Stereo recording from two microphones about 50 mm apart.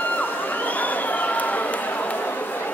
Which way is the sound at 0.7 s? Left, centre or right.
Left.